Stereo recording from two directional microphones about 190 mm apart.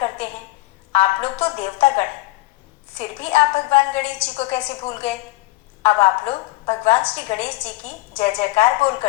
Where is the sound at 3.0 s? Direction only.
30° left (ahead or behind).